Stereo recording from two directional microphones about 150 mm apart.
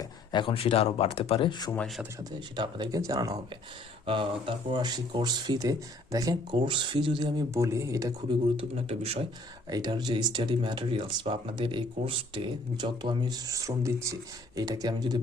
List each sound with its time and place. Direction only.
0.0 s speech: 30° left (ahead or behind)
2.6 s speech: 30° right (ahead or behind)
4.0 s speech: 35° right (ahead or behind)
8.5 s a man's voice: 40° right (ahead or behind)
9.6 s speech: 25° right (ahead or behind)